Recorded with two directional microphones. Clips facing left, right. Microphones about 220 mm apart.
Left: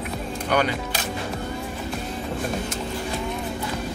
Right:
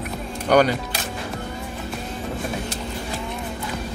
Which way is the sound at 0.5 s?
40° right (ahead or behind).